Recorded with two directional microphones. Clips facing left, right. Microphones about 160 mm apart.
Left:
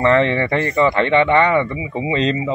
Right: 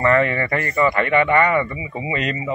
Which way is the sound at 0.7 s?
5° right (ahead or behind).